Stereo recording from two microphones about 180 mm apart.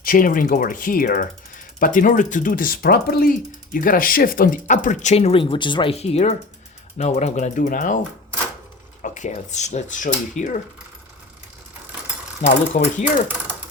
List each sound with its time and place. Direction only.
0.0 s speech: 50° left (ahead or behind)
9.0 s speech: 45° left (ahead or behind)
12.4 s speech: 45° left (ahead or behind)